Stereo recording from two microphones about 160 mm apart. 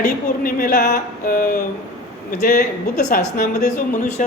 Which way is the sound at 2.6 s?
75° left (ahead or behind).